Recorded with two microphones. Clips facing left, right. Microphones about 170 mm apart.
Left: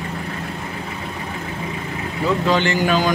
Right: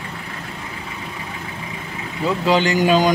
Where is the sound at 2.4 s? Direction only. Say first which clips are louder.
Right 4 dB; 10° right (ahead or behind).